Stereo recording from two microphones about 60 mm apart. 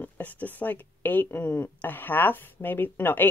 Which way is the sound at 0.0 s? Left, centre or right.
Left.